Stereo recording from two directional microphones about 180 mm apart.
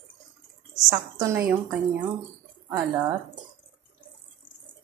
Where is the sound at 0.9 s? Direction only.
20° right (ahead or behind).